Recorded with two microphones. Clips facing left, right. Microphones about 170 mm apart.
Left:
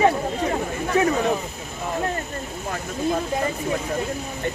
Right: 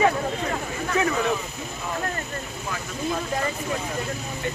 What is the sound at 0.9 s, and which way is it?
Speech, 35° left (ahead or behind).